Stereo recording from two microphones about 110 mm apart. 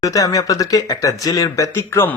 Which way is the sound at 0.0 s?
35° left (ahead or behind).